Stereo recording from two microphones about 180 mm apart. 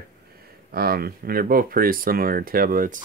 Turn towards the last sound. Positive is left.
turn(degrees=-50)  # may be behind; listen again after turning